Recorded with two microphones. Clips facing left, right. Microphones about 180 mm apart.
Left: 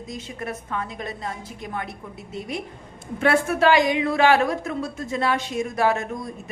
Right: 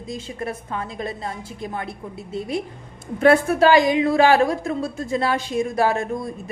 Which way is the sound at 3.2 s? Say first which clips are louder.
Right 4 dB; 35° right (ahead or behind).